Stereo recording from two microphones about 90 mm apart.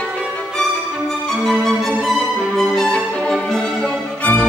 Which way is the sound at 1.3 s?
5° left (ahead or behind).